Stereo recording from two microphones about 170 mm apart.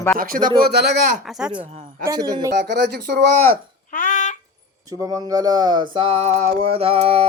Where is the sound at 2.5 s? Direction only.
90° right.